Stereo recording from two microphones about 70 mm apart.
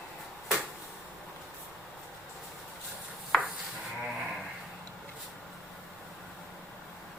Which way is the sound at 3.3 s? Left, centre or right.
Centre.